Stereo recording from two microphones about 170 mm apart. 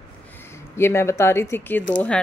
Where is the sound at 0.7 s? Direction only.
15° left (ahead or behind).